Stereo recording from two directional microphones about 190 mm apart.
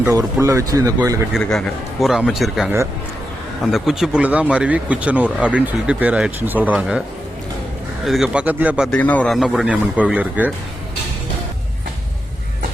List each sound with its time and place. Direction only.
0.0 s speech: 15° right (ahead or behind)
1.3 s speech: centre (ahead or behind)
3.7 s speech: centre (ahead or behind)
8.0 s speech: centre (ahead or behind)
8.9 s speech: 5° left (ahead or behind); by 10.5 s 10° right (ahead or behind)